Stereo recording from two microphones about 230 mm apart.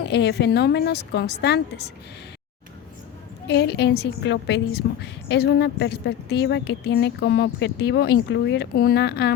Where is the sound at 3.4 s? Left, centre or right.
Left.